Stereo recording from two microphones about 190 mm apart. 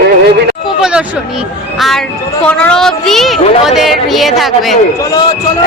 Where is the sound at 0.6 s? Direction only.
5° right (ahead or behind).